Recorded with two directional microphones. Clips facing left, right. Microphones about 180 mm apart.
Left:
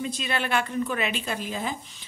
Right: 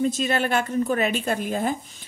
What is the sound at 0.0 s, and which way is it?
Speech, 45° right (ahead or behind).